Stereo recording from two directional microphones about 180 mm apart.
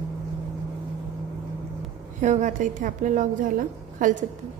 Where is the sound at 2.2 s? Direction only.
45° right (ahead or behind).